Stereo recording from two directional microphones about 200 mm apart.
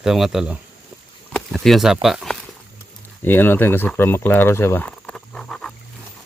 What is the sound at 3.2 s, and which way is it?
Speech, 10° left (ahead or behind).